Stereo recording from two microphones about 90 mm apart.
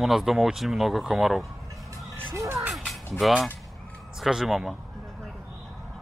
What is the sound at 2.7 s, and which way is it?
Music, centre (ahead or behind).